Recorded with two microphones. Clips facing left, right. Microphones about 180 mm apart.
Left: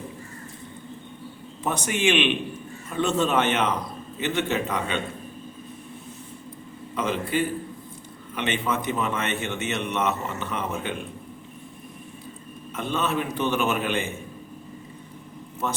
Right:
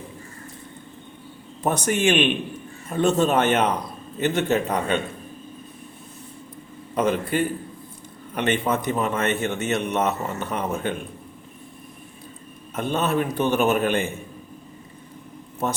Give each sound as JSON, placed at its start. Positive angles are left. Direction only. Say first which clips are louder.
{"t": 1.6, "sound": "a man's voice", "louder": "right 3 dB", "side_deg": -40}
{"t": 6.9, "sound": "a man's voice", "louder": "right 4 dB", "side_deg": -45}
{"t": 12.7, "sound": "a man's voice", "louder": "right 3 dB", "side_deg": -45}